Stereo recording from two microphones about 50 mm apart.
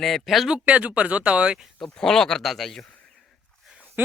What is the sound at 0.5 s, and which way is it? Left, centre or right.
Speech, right.